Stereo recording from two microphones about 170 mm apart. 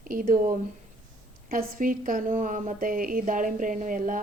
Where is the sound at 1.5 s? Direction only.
55° right (ahead or behind).